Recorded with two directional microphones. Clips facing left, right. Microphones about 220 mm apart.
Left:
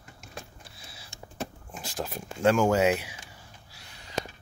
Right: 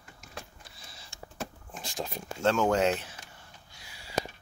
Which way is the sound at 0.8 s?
5° left (ahead or behind).